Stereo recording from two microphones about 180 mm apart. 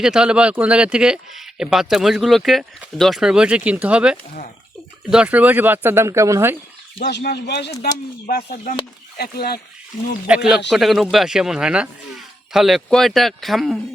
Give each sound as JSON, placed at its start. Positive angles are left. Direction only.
{"t": 0.0, "sound": "speech", "side_deg": -5}
{"t": 7.0, "sound": "speech", "side_deg": 60}
{"t": 8.3, "sound": "speech", "side_deg": 45}
{"t": 9.1, "sound": "speech", "side_deg": 60}
{"t": 10.2, "sound": "speech", "side_deg": -5}